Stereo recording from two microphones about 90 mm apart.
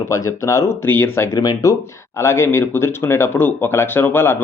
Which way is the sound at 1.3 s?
40° left (ahead or behind).